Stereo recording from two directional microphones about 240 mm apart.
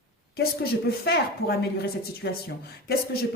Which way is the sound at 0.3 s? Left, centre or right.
Left.